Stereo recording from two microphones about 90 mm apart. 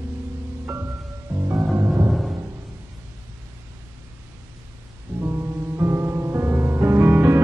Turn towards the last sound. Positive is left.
turn(degrees=-25)  # may be behind; listen again after turning